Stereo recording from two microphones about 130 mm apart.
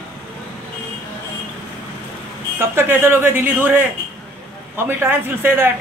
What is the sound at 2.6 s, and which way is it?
Speech, 20° right (ahead or behind).